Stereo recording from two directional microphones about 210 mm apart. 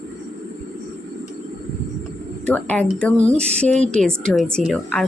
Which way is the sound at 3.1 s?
35° right (ahead or behind).